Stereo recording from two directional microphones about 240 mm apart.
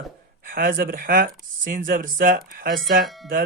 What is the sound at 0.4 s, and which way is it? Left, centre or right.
Speech, right.